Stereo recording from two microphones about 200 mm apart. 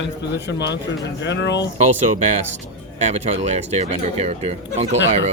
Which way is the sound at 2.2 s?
35° right (ahead or behind).